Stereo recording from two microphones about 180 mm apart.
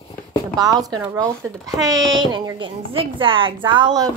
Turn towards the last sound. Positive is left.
turn(degrees=-25)  # may be behind; listen again after turning